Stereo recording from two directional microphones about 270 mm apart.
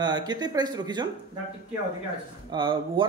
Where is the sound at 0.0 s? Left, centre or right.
Centre.